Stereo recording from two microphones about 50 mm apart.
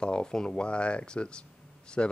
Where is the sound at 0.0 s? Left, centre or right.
Centre.